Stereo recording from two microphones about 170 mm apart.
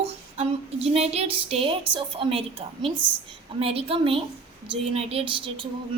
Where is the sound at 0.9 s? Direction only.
40° right (ahead or behind).